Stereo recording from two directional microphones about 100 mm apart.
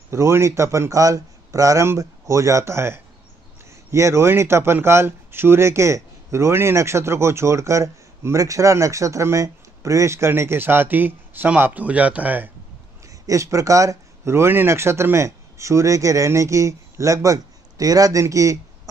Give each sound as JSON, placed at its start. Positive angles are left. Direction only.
{"t": 0.1, "sound": "speech", "side_deg": -30}
{"t": 13.0, "sound": "speech", "side_deg": -35}